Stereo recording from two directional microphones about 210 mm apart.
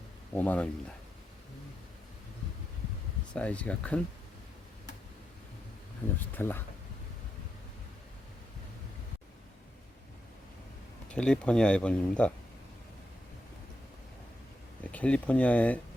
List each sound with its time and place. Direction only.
0.3 s speech: 5° left (ahead or behind)
3.3 s speech: 5° left (ahead or behind)
6.1 s speech: 10° left (ahead or behind)
11.1 s speech: 5° left (ahead or behind)
14.8 s speech: 5° left (ahead or behind)